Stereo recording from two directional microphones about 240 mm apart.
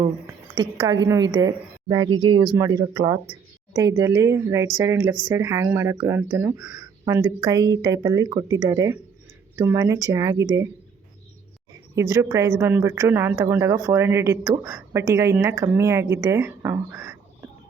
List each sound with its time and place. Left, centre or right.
0.5 s a woman's voice: centre
11.9 s a woman's voice: centre